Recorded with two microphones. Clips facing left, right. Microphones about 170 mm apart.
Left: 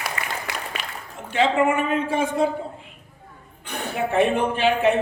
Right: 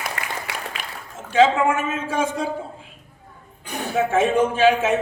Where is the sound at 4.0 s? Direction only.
90° right.